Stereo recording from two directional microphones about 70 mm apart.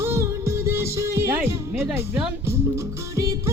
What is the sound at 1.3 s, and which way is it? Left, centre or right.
Speech, right.